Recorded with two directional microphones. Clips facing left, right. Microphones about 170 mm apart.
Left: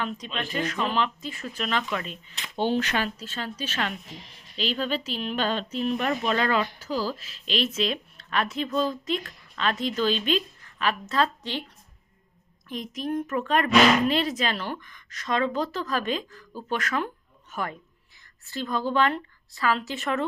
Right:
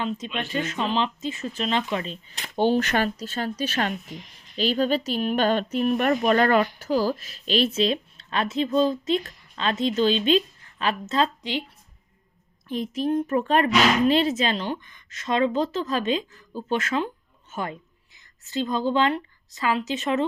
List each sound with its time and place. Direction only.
0.3 s a woman's voice: 25° right (ahead or behind)
2.3 s speech: 40° right (ahead or behind); by 11.6 s 15° right (ahead or behind)
12.6 s a woman's voice: 30° right (ahead or behind)